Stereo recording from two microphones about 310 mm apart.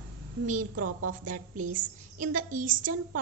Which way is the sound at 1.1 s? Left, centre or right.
Right.